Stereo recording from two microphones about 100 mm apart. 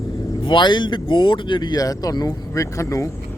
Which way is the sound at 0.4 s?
50° left (ahead or behind).